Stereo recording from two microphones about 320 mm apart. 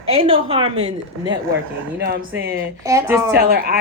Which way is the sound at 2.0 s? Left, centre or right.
Right.